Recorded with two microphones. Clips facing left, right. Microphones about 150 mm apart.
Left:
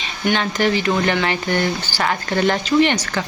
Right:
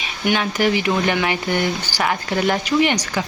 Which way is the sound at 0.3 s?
10° right (ahead or behind).